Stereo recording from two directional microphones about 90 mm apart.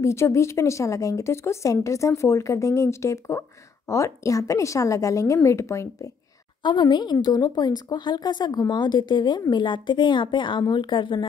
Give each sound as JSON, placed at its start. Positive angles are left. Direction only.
{"t": 0.0, "sound": "speech", "side_deg": 30}
{"t": 6.6, "sound": "a woman's voice", "side_deg": 60}